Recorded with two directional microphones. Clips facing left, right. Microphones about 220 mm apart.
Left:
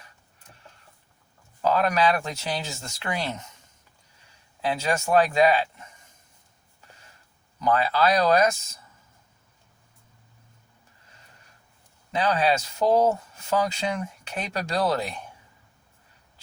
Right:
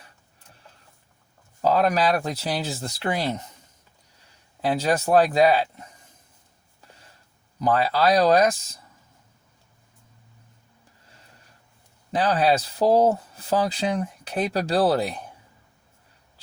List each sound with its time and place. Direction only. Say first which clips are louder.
1.6 s speech: right 2 dB; 35° right (ahead or behind)
4.6 s speech: right 4 dB; 35° right (ahead or behind)
7.6 s speech: right 2 dB; 35° right (ahead or behind)
12.1 s speech: right 2 dB; 35° right (ahead or behind)